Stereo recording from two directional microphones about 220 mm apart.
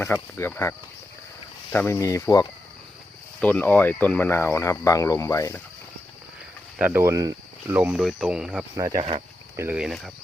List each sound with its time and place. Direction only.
0.0 s speech: 10° left (ahead or behind)
6.7 s speech: 10° right (ahead or behind)
8.7 s speech: 15° right (ahead or behind)
9.6 s speech: 5° right (ahead or behind)